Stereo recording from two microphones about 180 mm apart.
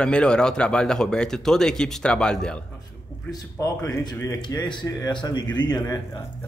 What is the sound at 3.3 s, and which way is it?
Speech, 20° left (ahead or behind).